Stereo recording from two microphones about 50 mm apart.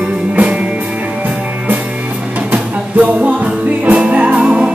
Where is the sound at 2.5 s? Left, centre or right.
Right.